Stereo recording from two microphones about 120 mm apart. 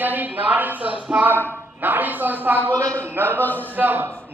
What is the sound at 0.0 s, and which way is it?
Speech, 15° right (ahead or behind).